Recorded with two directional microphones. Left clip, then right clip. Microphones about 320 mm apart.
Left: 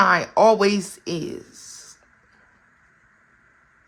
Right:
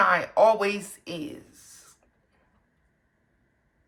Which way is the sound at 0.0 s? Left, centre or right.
Left.